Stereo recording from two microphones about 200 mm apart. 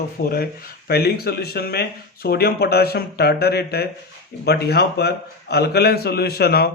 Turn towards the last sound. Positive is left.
turn(degrees=50)  # may be behind; listen again after turning